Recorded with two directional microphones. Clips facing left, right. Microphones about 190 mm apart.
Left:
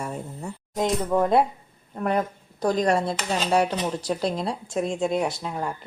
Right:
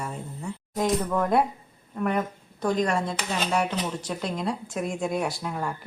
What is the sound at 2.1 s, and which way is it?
A woman's voice, 35° left (ahead or behind).